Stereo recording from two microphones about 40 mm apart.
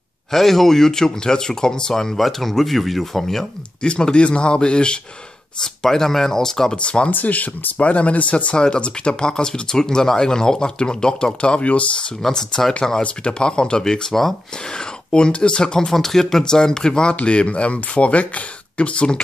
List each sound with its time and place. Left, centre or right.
0.3 s speech: centre
3.8 s speech: left
5.6 s speech: centre
6.7 s speech: left
7.1 s speech: left
8.5 s speech: left
12.3 s speech: centre
13.0 s speech: left